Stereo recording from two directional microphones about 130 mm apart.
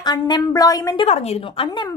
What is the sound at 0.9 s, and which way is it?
Speech, 50° left (ahead or behind).